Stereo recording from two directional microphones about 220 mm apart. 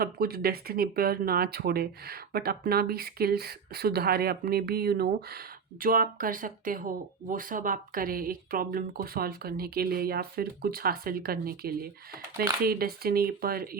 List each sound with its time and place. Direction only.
0.0 s speech: 45° right (ahead or behind)